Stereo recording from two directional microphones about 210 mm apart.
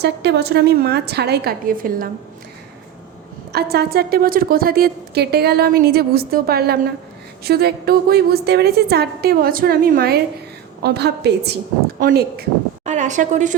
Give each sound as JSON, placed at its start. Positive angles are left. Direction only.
{"t": 0.0, "sound": "a woman's voice", "side_deg": -55}
{"t": 3.5, "sound": "a woman's voice", "side_deg": -50}